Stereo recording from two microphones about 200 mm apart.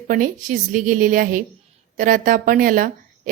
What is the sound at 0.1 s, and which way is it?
A woman's voice, 40° right (ahead or behind).